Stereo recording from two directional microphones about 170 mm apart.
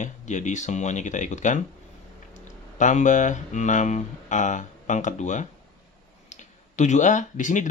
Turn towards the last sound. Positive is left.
turn(degrees=45)  # may be behind; listen again after turning